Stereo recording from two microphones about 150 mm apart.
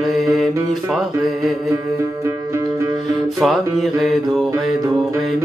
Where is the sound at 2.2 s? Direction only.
20° right (ahead or behind).